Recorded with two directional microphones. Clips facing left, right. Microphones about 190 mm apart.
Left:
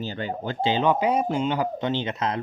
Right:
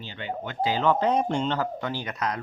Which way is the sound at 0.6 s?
20° left (ahead or behind).